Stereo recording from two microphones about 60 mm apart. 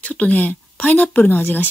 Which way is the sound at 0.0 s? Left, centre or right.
Left.